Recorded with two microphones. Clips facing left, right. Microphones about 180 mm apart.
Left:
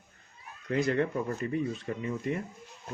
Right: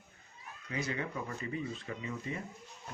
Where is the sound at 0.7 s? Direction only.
60° left (ahead or behind).